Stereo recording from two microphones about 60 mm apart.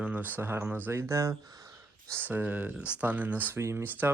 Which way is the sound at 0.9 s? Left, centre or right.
Right.